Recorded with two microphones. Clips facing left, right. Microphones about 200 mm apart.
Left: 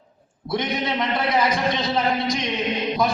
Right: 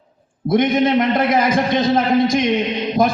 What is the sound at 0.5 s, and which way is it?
A man's voice, 50° right (ahead or behind).